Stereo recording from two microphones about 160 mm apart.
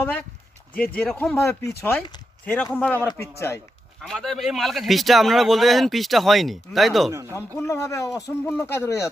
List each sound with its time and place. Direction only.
0.0 s speech: 10° left (ahead or behind)
4.0 s speech: 5° left (ahead or behind)
7.1 s speech: 20° right (ahead or behind)
7.3 s a man's voice: 20° left (ahead or behind)